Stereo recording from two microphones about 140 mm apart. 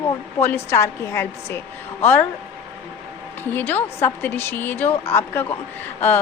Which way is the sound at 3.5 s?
15° left (ahead or behind).